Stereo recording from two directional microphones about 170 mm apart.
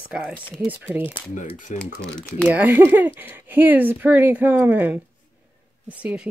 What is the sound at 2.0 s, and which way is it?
Speech, 5° left (ahead or behind).